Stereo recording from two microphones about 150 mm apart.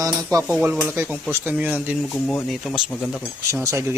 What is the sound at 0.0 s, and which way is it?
Speech, 25° right (ahead or behind).